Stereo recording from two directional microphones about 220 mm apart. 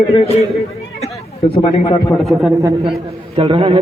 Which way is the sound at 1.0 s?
25° left (ahead or behind).